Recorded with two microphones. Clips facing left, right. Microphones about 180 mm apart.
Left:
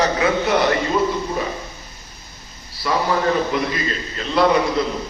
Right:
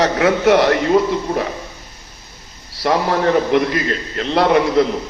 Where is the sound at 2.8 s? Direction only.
65° right (ahead or behind).